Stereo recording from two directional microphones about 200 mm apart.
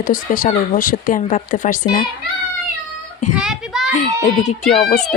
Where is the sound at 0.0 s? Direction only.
40° left (ahead or behind).